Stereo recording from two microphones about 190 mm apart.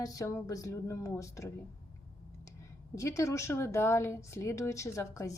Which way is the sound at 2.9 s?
15° left (ahead or behind).